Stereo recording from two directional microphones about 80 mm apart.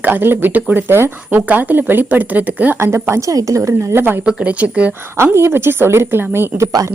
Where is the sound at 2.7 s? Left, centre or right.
Right.